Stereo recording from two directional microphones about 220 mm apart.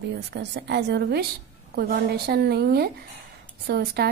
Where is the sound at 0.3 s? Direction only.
50° right (ahead or behind).